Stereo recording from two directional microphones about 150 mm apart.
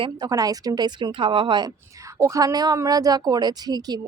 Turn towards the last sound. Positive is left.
turn(degrees=-25)  # may be behind; listen again after turning